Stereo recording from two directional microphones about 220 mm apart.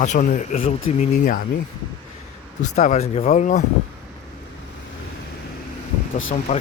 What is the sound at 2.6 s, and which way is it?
Speech, 35° left (ahead or behind).